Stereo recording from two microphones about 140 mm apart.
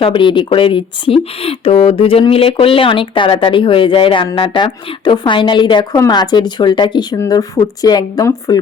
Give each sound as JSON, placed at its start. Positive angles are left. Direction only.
{"t": 0.0, "sound": "speech", "side_deg": 35}